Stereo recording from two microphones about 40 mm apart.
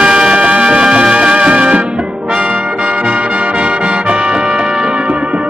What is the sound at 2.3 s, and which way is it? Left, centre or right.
Brass instrument, right.